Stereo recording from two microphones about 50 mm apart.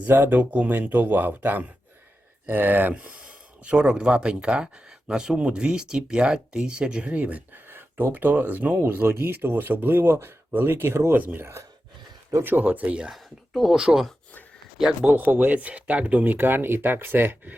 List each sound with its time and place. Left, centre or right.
0.1 s speech: right
2.9 s speech: right
7.1 s speech: right
7.5 s a sound: right
8.1 s speech: right
9.0 s speech: right
11.2 s speech: right
12.6 s speech: right
13.1 s speech: centre
13.7 s speech: centre
15.1 s speech: right